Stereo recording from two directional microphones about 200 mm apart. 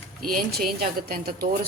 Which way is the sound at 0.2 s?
45° right (ahead or behind).